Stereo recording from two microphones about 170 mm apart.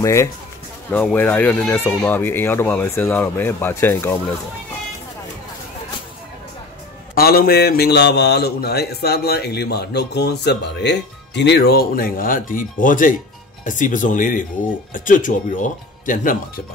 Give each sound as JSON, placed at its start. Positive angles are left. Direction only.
{"t": 0.0, "sound": "speech", "side_deg": 15}
{"t": 7.2, "sound": "a man's voice", "side_deg": 60}